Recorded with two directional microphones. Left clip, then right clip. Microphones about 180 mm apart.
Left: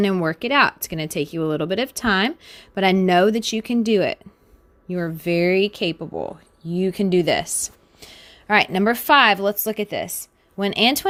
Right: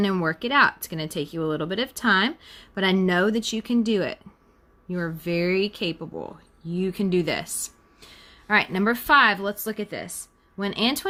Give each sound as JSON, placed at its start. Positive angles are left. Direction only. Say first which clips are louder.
{"t": 0.0, "sound": "speech", "louder": "left 3 dB", "side_deg": 30}